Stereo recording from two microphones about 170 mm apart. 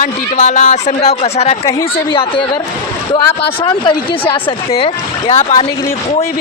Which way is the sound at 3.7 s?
30° left (ahead or behind).